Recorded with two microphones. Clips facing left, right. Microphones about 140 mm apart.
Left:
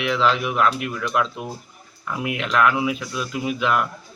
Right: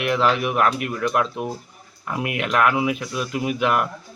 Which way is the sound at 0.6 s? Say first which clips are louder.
Right 1 dB; 50° right (ahead or behind).